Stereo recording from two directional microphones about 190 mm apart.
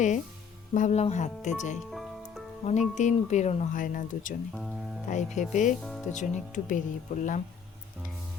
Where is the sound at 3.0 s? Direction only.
40° left (ahead or behind).